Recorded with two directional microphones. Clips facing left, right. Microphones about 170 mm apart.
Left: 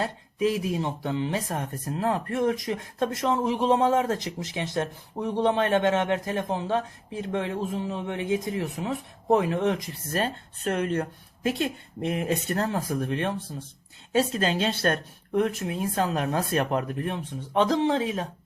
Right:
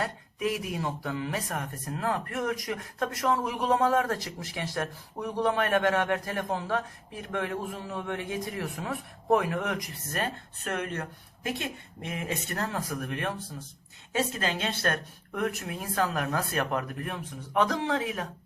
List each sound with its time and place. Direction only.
0.0 s speech: 25° left (ahead or behind)